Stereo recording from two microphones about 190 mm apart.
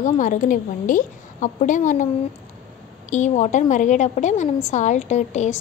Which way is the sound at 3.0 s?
40° left (ahead or behind).